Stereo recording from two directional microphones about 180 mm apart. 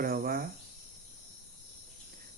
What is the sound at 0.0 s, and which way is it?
Cricket, 55° right (ahead or behind).